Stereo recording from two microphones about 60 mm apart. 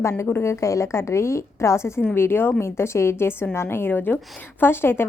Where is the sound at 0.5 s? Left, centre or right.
Left.